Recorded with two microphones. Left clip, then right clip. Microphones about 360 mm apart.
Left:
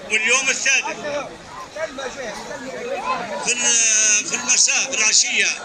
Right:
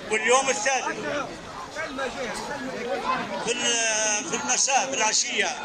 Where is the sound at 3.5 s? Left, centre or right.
Right.